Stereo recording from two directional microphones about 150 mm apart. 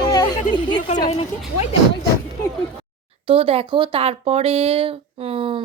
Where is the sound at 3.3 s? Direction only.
40° right (ahead or behind).